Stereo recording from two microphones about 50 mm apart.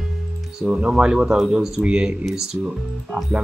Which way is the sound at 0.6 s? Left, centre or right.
Centre.